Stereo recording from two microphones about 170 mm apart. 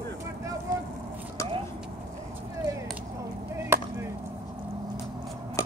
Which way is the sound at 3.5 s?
15° right (ahead or behind).